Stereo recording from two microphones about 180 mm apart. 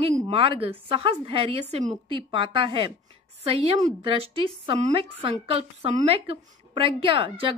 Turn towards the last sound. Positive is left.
turn(degrees=-30)  # may be behind; listen again after turning